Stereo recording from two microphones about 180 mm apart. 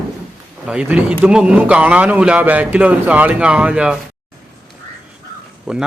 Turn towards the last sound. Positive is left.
turn(degrees=0)  # may be behind; listen again after turning